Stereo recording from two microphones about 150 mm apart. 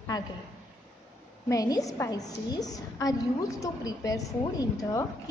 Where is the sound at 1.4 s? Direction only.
25° left (ahead or behind).